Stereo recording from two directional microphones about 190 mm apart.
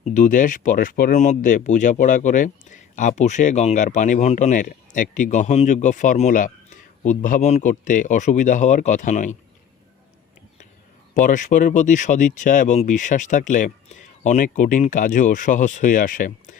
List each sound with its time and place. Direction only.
0.0 s speech: 40° left (ahead or behind)
11.1 s speech: 45° left (ahead or behind)